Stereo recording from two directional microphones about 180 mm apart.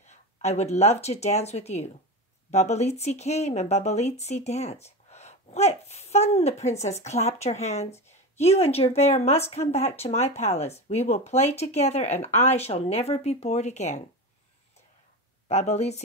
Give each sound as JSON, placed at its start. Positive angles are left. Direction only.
{"t": 0.1, "sound": "a woman's voice", "side_deg": 35}
{"t": 15.4, "sound": "a woman's voice", "side_deg": 40}